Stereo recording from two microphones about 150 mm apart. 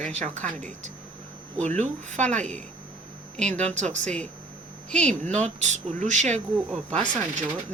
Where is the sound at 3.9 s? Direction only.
50° right (ahead or behind).